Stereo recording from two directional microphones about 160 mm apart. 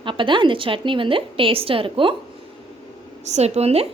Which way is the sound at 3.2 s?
45° right (ahead or behind).